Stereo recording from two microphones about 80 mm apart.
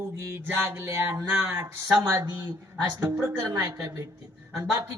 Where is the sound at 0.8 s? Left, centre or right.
Right.